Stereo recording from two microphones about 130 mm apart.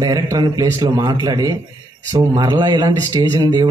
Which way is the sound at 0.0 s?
30° right (ahead or behind).